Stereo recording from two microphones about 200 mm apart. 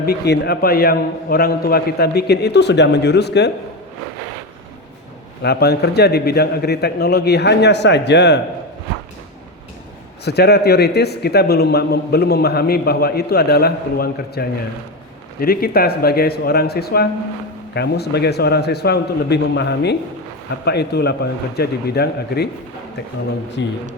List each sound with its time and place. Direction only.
0.0 s a man's voice: 50° left (ahead or behind)
5.4 s a man's voice: 55° left (ahead or behind)
10.2 s a man's voice: 55° left (ahead or behind)
23.6 s a man's voice: 65° left (ahead or behind)